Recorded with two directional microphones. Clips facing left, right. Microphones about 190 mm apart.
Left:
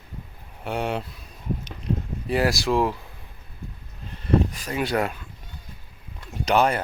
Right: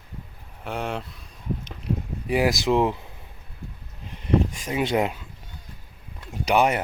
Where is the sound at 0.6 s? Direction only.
Centre (ahead or behind).